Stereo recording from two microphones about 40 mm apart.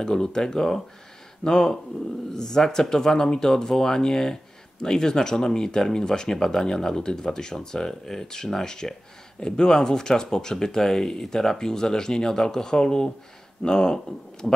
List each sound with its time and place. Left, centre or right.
0.0 s speech: centre